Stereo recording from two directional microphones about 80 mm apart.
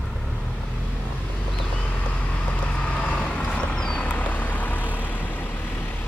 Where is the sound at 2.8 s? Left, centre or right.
Centre.